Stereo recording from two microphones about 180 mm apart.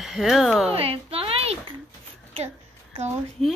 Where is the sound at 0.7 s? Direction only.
30° right (ahead or behind).